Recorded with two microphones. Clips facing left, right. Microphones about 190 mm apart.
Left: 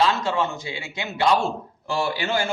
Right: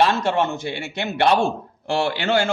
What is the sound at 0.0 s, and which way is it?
A man's voice, 65° right (ahead or behind).